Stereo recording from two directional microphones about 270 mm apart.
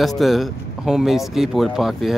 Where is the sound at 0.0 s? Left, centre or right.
Centre.